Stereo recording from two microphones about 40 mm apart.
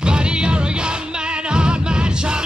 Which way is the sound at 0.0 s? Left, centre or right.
Right.